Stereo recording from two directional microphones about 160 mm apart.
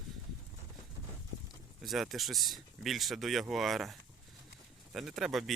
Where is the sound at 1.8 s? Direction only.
Centre (ahead or behind).